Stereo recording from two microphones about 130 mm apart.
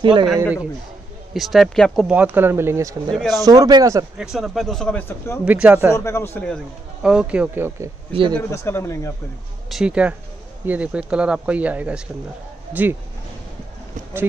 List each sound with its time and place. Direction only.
0.0 s speech: 40° right (ahead or behind)
1.3 s speech: centre (ahead or behind)
2.1 s speech: 15° right (ahead or behind)
3.1 s speech: centre (ahead or behind)
3.3 s speech: 30° right (ahead or behind)
4.2 s speech: 5° right (ahead or behind)
5.0 s speech: 20° left (ahead or behind)
5.4 s speech: 10° right (ahead or behind)
5.9 s speech: 20° left (ahead or behind)
7.0 s speech: 5° right (ahead or behind)
8.1 s speech: 40° right (ahead or behind)
8.4 s speech: 20° left (ahead or behind)
9.7 s speech: 5° right (ahead or behind)